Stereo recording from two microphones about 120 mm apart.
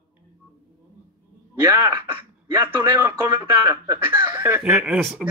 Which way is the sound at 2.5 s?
35° right (ahead or behind).